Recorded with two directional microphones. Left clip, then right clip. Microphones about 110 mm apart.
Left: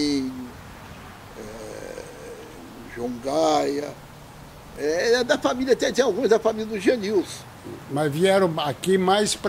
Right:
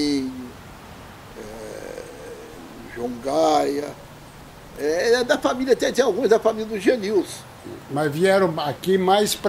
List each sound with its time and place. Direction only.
0.0 s a sound: centre (ahead or behind)
1.4 s burping: centre (ahead or behind)
2.9 s speech: centre (ahead or behind)
7.9 s a man's voice: 15° right (ahead or behind)
8.9 s speech: 20° left (ahead or behind)